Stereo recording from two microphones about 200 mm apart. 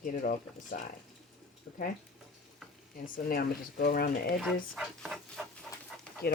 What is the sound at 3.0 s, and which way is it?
Speech, 45° left (ahead or behind).